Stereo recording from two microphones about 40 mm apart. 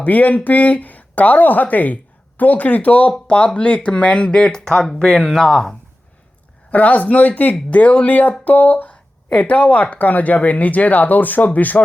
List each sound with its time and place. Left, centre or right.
0.0 s speech: left
3.1 s speech: left; by 5.7 s centre
6.7 s speech: left